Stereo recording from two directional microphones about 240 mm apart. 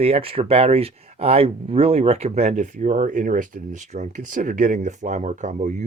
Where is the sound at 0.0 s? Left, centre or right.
Right.